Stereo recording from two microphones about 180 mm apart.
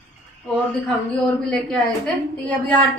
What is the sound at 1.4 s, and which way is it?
A woman's voice, 5° left (ahead or behind).